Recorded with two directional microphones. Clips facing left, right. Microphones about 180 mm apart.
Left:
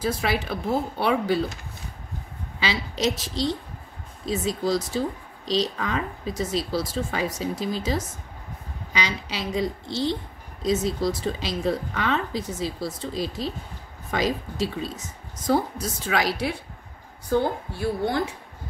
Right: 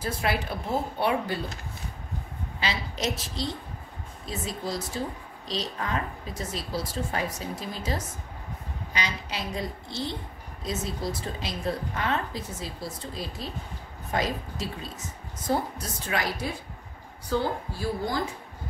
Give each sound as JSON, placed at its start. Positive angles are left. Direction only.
{"t": 0.0, "sound": "speech", "side_deg": 90}
{"t": 2.6, "sound": "speech", "side_deg": 90}
{"t": 8.9, "sound": "speech", "side_deg": 90}
{"t": 17.3, "sound": "a woman's voice", "side_deg": 55}